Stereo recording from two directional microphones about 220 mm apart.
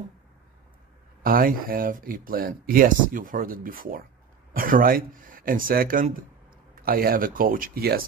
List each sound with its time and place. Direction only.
1.2 s speech: 40° right (ahead or behind)